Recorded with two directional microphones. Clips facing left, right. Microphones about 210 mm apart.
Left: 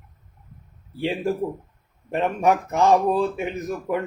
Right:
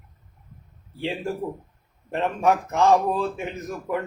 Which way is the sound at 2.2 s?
15° left (ahead or behind).